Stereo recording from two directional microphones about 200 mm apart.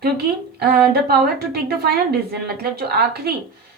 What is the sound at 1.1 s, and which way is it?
Speech, 55° right (ahead or behind).